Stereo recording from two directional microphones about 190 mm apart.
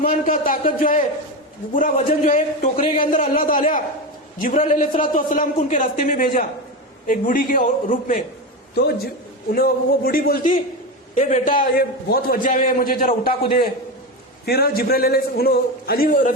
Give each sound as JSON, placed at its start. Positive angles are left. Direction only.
{"t": 0.0, "sound": "a man's voice", "side_deg": 45}
{"t": 8.7, "sound": "a man's voice", "side_deg": 55}